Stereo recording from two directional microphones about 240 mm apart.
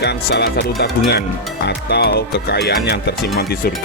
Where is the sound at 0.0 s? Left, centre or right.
Left.